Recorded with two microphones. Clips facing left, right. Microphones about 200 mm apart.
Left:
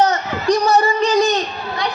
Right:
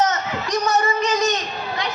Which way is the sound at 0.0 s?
35° left (ahead or behind).